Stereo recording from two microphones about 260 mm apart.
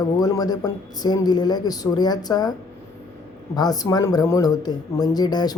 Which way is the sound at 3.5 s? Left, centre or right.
Centre.